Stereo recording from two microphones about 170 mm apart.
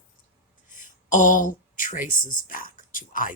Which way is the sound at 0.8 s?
50° left (ahead or behind).